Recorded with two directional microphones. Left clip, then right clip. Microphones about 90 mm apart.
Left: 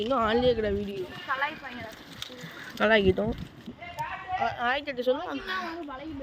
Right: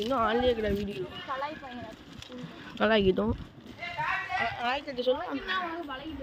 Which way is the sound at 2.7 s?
5° right (ahead or behind).